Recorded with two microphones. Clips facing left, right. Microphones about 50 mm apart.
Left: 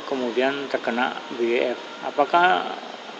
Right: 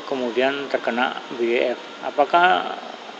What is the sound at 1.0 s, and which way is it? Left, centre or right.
Speech, centre.